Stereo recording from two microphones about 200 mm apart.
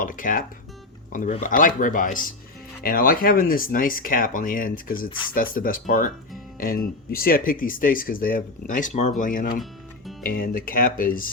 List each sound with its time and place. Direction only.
0.0 s speech: 40° left (ahead or behind)